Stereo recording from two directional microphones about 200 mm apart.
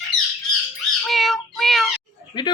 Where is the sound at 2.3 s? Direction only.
20° left (ahead or behind).